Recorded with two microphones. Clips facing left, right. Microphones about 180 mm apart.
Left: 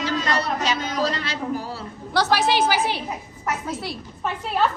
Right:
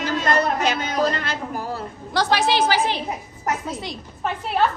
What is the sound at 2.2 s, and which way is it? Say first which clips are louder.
Speech: even; 10° left (ahead or behind).